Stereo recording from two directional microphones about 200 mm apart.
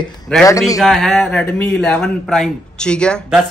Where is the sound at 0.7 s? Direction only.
Centre (ahead or behind).